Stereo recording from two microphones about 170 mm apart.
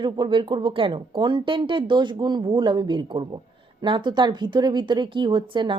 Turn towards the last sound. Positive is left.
turn(degrees=-30)  # may be behind; listen again after turning